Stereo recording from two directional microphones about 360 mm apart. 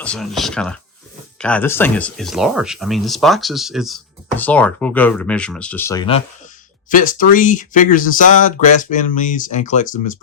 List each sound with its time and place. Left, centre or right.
0.0 s speech: centre; by 10.0 s left